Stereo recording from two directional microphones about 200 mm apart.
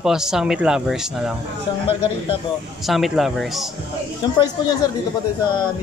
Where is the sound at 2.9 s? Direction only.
Centre (ahead or behind).